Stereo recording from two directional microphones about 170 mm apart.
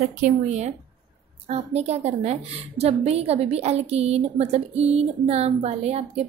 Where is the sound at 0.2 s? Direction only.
40° right (ahead or behind).